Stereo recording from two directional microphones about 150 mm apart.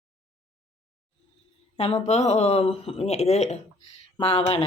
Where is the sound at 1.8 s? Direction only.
45° left (ahead or behind).